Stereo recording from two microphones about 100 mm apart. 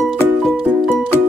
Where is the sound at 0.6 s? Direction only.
15° right (ahead or behind).